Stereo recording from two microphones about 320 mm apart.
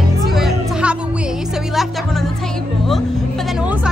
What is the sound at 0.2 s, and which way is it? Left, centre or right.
Music, centre.